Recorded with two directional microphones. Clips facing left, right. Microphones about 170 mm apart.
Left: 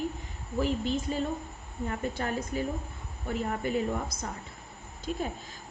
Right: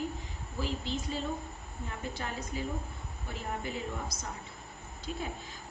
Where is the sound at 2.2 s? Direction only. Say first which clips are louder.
Left 6 dB; 55° left (ahead or behind).